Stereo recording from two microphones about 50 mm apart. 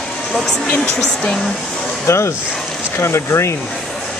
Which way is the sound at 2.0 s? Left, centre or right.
Left.